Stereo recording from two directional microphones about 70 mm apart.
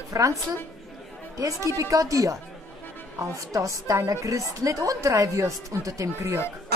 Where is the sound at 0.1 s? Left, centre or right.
Right.